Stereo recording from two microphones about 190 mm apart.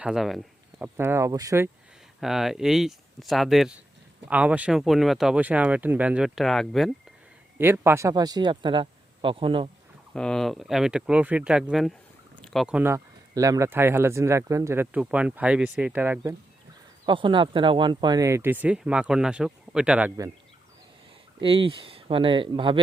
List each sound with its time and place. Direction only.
0.0 s speech: centre (ahead or behind)
0.9 s speech: 15° right (ahead or behind)
2.2 s speech: centre (ahead or behind)
7.6 s speech: 10° right (ahead or behind); by 9.6 s 25° right (ahead or behind)
10.2 s speech: 5° left (ahead or behind)
17.1 s speech: 25° right (ahead or behind); by 20.1 s 5° right (ahead or behind)
21.4 s speech: 30° right (ahead or behind)